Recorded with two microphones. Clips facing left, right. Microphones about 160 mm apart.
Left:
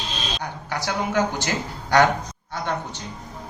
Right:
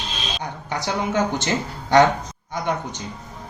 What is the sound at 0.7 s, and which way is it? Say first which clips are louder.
Speech: right 1 dB; 20° right (ahead or behind).